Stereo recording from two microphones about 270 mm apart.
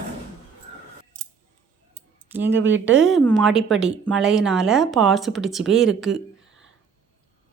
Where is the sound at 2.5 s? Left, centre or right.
Right.